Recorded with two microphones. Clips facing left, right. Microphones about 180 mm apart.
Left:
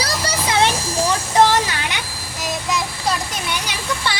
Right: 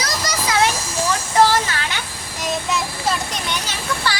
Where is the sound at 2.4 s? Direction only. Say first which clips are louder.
Right 1 dB; centre (ahead or behind).